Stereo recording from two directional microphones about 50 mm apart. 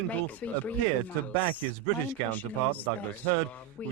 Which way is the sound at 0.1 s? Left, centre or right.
Left.